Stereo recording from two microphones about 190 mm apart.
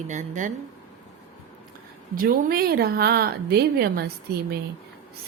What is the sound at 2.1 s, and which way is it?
A woman's voice, 50° right (ahead or behind).